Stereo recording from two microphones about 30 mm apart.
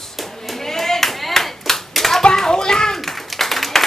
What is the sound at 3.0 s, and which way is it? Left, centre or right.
Clapping, centre.